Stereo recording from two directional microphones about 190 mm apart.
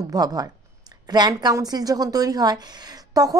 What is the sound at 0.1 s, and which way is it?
Speech, 20° right (ahead or behind).